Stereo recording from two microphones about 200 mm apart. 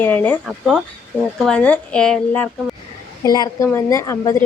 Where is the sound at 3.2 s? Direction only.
20° left (ahead or behind).